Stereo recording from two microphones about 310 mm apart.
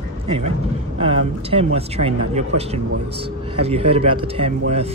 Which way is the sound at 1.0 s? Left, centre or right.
Centre.